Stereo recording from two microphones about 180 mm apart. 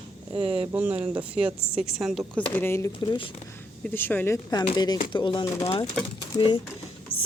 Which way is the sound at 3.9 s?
10° left (ahead or behind).